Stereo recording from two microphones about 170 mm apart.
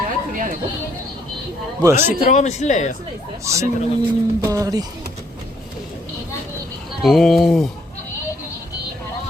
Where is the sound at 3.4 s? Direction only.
15° right (ahead or behind).